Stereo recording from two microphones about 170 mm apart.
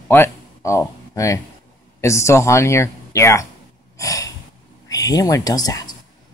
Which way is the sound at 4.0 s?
20° left (ahead or behind).